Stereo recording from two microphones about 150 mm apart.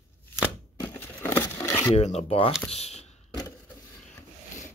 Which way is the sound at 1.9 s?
45° left (ahead or behind).